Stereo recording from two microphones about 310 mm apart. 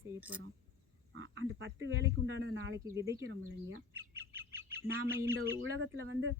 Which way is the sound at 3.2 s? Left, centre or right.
Right.